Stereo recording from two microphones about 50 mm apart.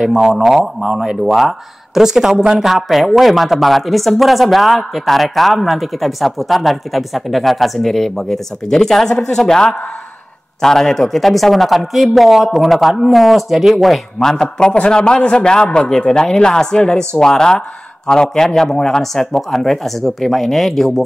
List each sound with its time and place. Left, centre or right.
0.0 s a woman's voice: centre